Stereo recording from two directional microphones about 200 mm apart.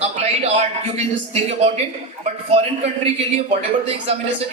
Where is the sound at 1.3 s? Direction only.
30° right (ahead or behind).